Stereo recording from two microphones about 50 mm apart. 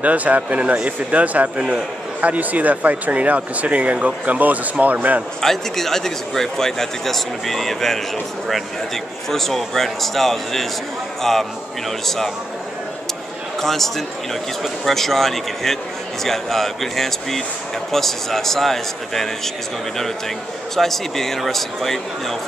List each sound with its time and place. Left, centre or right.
0.0 s speech: right
5.4 s a man's voice: centre
13.6 s speech: centre
20.7 s speech: centre